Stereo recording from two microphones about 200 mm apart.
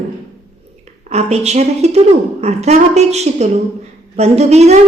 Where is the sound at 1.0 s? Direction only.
30° right (ahead or behind).